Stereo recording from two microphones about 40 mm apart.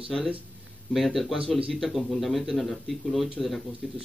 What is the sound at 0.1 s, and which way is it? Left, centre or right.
Speech, centre.